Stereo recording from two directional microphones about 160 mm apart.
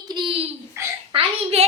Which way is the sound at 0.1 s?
30° right (ahead or behind).